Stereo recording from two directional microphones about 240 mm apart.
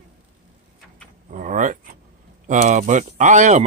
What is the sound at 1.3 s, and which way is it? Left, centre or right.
Speech, right.